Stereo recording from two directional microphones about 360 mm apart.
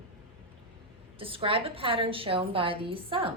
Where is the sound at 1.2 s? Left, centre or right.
Centre.